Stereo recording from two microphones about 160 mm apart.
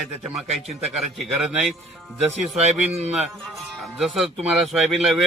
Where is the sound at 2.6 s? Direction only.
40° right (ahead or behind).